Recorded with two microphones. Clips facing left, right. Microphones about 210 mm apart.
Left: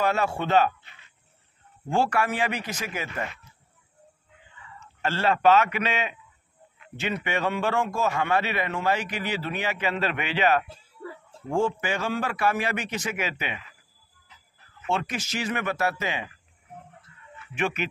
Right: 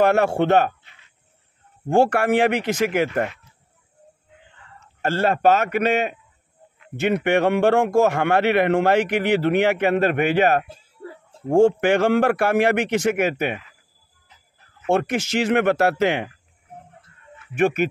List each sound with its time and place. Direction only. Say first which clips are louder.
0.0 s a man's voice: right 8 dB; 65° right (ahead or behind)
1.9 s a man's voice: right 7 dB; 60° right (ahead or behind)
4.6 s a man's voice: right 3 dB; 50° right (ahead or behind)
11.6 s a man's voice: right 14 dB; 65° right (ahead or behind)
13.0 s speech: right 11 dB; 50° right (ahead or behind)
14.9 s speech: right 8 dB; 60° right (ahead or behind)
17.6 s speech: right 9 dB; 50° right (ahead or behind)